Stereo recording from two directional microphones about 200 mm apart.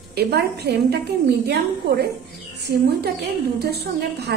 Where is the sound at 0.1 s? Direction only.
55° right (ahead or behind).